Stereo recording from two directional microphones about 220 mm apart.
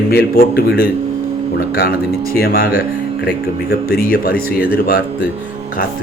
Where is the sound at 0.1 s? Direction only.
45° left (ahead or behind).